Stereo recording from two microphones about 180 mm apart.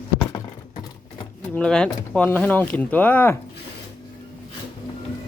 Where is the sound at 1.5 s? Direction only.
5° left (ahead or behind).